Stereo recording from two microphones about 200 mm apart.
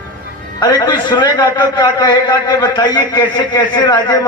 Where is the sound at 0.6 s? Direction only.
20° left (ahead or behind).